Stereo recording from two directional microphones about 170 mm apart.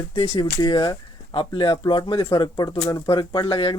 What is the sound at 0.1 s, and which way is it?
Speech, 30° left (ahead or behind).